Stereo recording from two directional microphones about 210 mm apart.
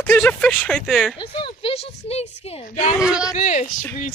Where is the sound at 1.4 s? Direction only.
25° left (ahead or behind).